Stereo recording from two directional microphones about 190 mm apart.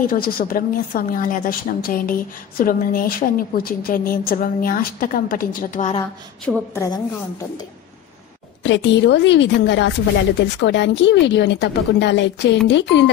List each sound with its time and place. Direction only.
0.0 s a woman's voice: 50° left (ahead or behind)
6.5 s a woman's voice: 5° right (ahead or behind)
8.6 s a woman's voice: 75° left (ahead or behind)